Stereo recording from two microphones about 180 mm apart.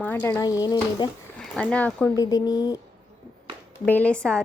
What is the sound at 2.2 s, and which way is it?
Speech, 20° left (ahead or behind).